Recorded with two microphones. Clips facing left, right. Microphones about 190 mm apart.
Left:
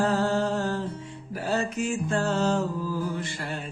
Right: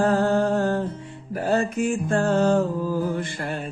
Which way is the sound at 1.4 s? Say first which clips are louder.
Right 5 dB; 55° right (ahead or behind).